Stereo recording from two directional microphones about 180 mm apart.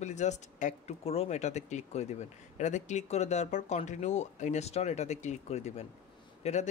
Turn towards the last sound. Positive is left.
turn(degrees=40)  # may be behind; listen again after turning